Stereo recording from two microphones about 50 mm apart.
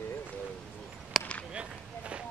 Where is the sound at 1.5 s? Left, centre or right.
Right.